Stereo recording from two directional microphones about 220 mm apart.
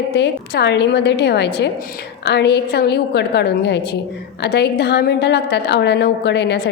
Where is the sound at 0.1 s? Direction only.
50° left (ahead or behind).